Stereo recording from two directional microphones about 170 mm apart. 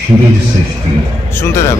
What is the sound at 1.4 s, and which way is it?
Speech, 15° left (ahead or behind).